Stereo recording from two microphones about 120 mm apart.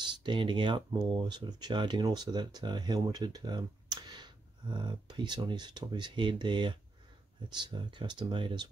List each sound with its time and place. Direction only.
0.0 s speech: 40° right (ahead or behind)